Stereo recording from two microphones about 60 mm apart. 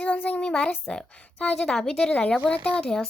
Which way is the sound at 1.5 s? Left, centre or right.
Centre.